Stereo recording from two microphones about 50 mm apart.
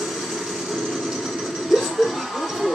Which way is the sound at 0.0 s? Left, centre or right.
Centre.